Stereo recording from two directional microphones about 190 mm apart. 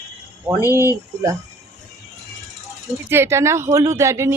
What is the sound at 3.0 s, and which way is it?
Speech, 10° right (ahead or behind).